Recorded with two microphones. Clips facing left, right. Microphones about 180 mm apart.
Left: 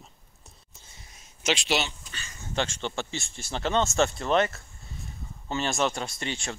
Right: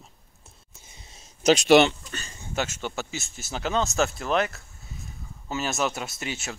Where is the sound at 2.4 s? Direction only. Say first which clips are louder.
Even; 10° right (ahead or behind).